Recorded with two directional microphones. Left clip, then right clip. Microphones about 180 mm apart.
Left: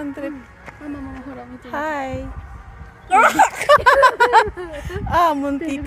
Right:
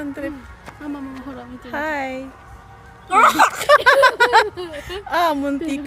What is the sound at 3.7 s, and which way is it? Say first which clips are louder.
Speech: even; 10° left (ahead or behind).